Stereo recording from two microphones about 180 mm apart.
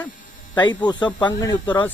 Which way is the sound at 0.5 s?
25° left (ahead or behind).